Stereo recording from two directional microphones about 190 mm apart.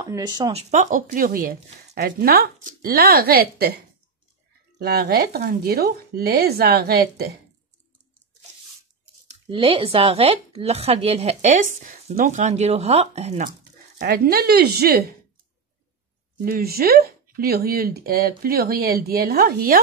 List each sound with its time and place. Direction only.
0.0 s speech: 20° right (ahead or behind); by 7.2 s 55° right (ahead or behind)
9.3 s speech: 30° right (ahead or behind)
13.9 s speech: 50° right (ahead or behind)
16.3 s speech: 50° right (ahead or behind)